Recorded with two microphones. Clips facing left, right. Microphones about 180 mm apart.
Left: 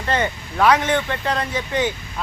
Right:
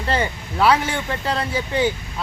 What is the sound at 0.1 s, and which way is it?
Speech, 30° right (ahead or behind).